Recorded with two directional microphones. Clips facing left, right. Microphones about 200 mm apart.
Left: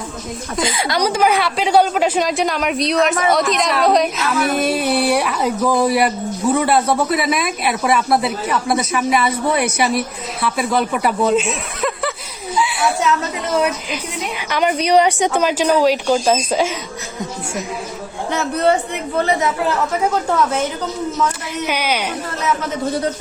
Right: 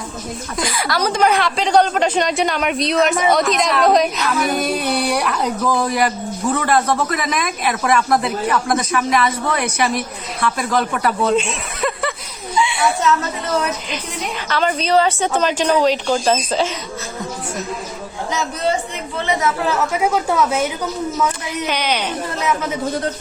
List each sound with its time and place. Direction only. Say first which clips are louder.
0.5 s speech: left 2 dB; 25° left (ahead or behind); by 12.1 s 5° left (ahead or behind)
12.5 s a sound: right 1 dB; 5° left (ahead or behind)
13.9 s speech: left 1 dB; 15° left (ahead or behind)
18.3 s a man's voice: left 4 dB; 60° left (ahead or behind)
19.9 s speech: even; 10° right (ahead or behind)
21.7 s speech: left 1 dB; 10° left (ahead or behind)